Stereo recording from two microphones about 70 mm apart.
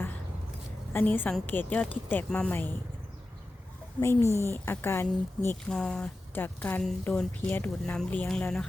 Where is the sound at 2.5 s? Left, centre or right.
Left.